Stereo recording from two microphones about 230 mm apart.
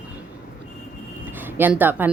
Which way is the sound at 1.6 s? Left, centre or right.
Centre.